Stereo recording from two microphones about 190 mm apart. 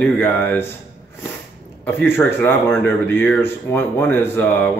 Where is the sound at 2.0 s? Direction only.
10° left (ahead or behind).